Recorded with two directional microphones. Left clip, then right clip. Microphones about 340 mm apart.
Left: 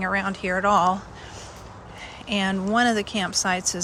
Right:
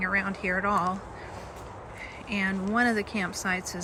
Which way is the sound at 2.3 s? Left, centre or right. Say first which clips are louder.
Left 5 dB; centre.